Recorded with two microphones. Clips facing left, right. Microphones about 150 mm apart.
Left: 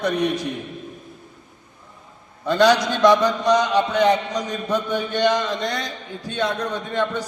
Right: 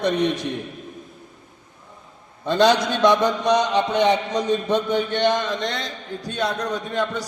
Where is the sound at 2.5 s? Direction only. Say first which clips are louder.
Left 1 dB; 20° right (ahead or behind).